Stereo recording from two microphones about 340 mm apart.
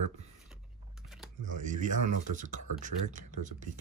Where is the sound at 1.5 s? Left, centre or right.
Right.